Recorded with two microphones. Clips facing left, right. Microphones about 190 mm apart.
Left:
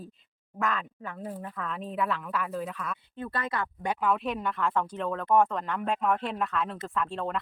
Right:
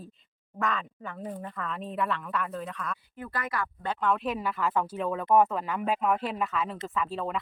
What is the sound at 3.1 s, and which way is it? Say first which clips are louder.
Speech: left 2 dB; 30° left (ahead or behind).